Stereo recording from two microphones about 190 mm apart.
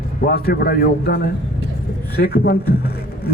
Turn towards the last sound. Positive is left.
turn(degrees=55)  # may be behind; listen again after turning